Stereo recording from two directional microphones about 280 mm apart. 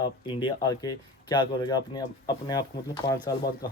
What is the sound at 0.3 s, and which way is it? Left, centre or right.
Speech, centre.